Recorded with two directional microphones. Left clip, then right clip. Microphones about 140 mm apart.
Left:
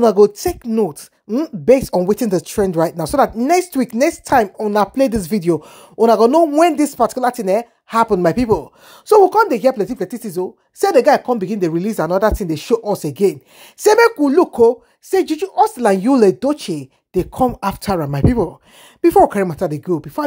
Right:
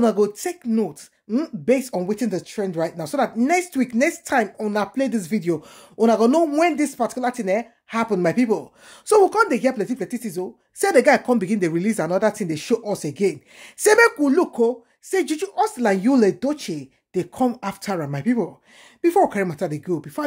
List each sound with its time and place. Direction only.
0.0 s speech: 40° left (ahead or behind)
2.0 s speech: 55° left (ahead or behind); by 10.9 s 30° left (ahead or behind)
10.9 s speech: 15° left (ahead or behind); by 14.8 s 35° left (ahead or behind)
15.0 s speech: 20° left (ahead or behind)